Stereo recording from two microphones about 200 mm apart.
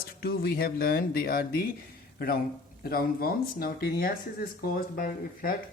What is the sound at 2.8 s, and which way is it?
Speech, 50° left (ahead or behind).